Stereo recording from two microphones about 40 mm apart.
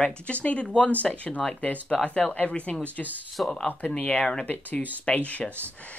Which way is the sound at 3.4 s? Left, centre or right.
Centre.